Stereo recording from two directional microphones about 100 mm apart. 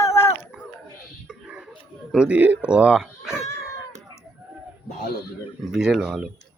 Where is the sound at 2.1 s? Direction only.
10° right (ahead or behind).